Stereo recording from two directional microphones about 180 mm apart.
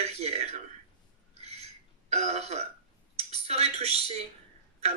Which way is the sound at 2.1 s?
35° right (ahead or behind).